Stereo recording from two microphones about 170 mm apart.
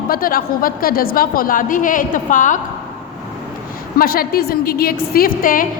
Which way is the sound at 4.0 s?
60° left (ahead or behind).